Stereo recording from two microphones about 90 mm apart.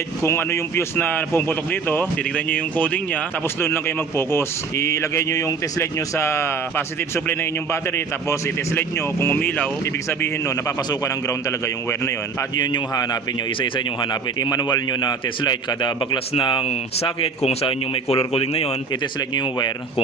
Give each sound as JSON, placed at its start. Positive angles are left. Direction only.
{"t": 0.2, "sound": "a man's voice", "side_deg": 30}
{"t": 3.6, "sound": "a man's voice", "side_deg": 25}
{"t": 12.5, "sound": "a man's voice", "side_deg": 50}
{"t": 13.6, "sound": "a man's voice", "side_deg": 65}
{"t": 19.3, "sound": "a man's voice", "side_deg": 55}